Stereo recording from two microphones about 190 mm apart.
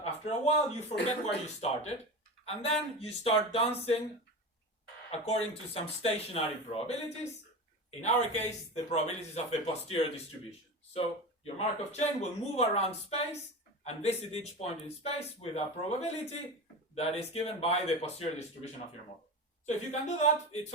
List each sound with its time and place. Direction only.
0.0 s speech: 35° left (ahead or behind)
2.4 s speech: 30° left (ahead or behind)
5.1 s speech: 35° left (ahead or behind)
8.0 s speech: 35° left (ahead or behind)